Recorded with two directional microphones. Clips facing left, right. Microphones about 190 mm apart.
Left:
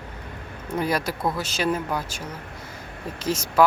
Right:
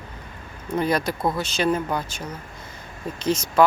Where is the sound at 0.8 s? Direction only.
5° left (ahead or behind).